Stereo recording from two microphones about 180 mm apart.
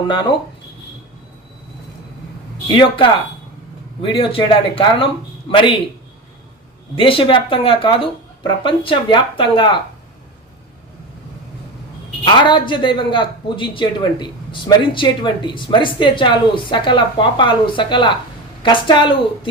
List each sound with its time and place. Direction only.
0.1 s speech: 25° left (ahead or behind)
2.7 s speech: 25° left (ahead or behind)
6.9 s speech: 30° left (ahead or behind)
12.2 s speech: 25° left (ahead or behind)